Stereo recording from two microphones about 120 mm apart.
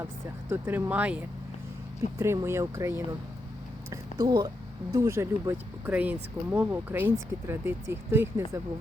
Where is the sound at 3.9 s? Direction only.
35° right (ahead or behind).